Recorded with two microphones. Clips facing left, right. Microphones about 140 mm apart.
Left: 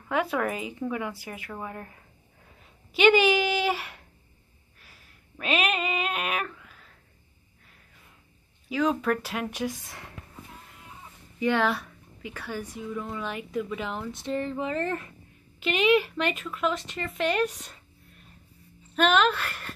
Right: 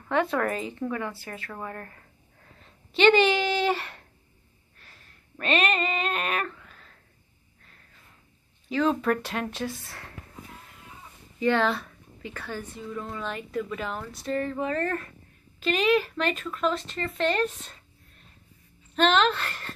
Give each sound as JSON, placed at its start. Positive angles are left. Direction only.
{"t": 0.1, "sound": "a woman's voice", "side_deg": 5}
{"t": 4.7, "sound": "a sound", "side_deg": 5}
{"t": 8.6, "sound": "a woman's voice", "side_deg": 5}
{"t": 11.3, "sound": "a woman's voice", "side_deg": 15}
{"t": 18.9, "sound": "a woman's voice", "side_deg": 10}